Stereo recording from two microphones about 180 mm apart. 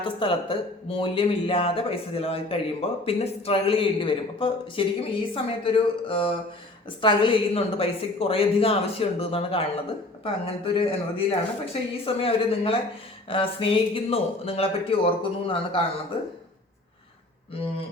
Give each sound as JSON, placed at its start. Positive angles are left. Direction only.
{"t": 0.0, "sound": "a woman's voice", "side_deg": 30}